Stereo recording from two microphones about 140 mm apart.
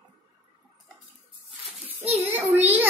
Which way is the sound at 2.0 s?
45° right (ahead or behind).